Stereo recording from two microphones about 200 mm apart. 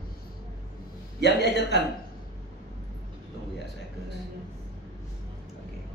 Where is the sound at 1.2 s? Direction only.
60° left (ahead or behind).